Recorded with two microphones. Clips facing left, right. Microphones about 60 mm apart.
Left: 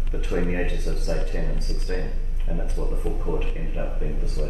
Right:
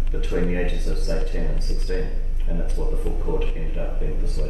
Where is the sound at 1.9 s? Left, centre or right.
Left.